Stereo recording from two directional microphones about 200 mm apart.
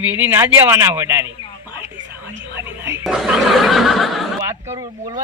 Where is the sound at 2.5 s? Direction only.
10° right (ahead or behind).